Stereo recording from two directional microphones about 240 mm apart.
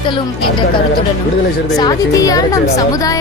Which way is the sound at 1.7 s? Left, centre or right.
Centre.